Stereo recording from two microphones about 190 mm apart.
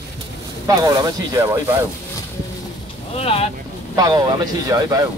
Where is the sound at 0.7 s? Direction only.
20° right (ahead or behind).